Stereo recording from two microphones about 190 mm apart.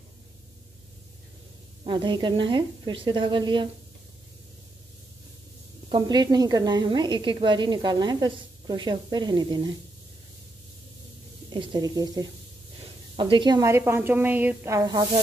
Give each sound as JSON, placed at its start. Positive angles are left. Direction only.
{"t": 1.9, "sound": "a woman's voice", "side_deg": -25}
{"t": 5.9, "sound": "a woman's voice", "side_deg": -25}
{"t": 11.5, "sound": "a woman's voice", "side_deg": -20}